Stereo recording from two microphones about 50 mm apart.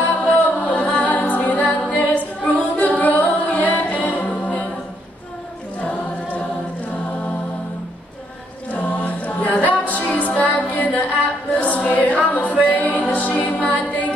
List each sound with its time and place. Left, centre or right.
0.0 s music: left
1.0 s a capella: left
5.8 s choir: left
8.7 s music: left
11.6 s a capella: left
12.6 s music: left